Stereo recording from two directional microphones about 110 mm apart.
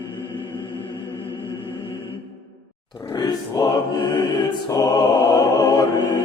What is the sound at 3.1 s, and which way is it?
Music, 35° left (ahead or behind).